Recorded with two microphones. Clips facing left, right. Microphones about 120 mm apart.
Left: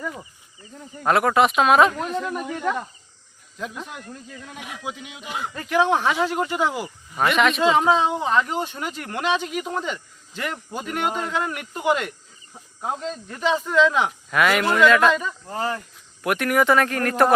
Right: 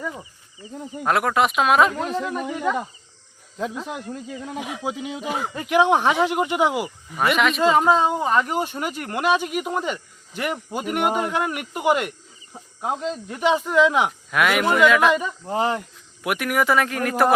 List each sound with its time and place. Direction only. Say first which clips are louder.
0.1 s speech: even; 15° right (ahead or behind)
1.0 s speech: left 2 dB; centre (ahead or behind)
2.0 s speech: right 1 dB; 25° right (ahead or behind)
2.3 s speech: right 2 dB; centre (ahead or behind)
3.9 s speech: right 6 dB; 15° right (ahead or behind)
4.4 s speech: right 5 dB; 30° right (ahead or behind)
5.5 s speech: right 2 dB; 15° right (ahead or behind)
15.2 s speech: right 4 dB; 20° right (ahead or behind)
16.2 s speech: left 2 dB; 5° right (ahead or behind)